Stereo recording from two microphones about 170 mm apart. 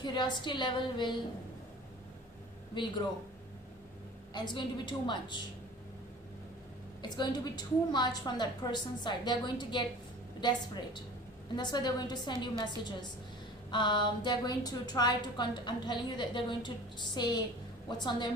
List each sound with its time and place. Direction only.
0.0 s a woman's voice: 25° left (ahead or behind)
2.8 s a woman's voice: 25° left (ahead or behind)
4.4 s a woman's voice: 25° left (ahead or behind)
7.0 s a woman's voice: 25° left (ahead or behind)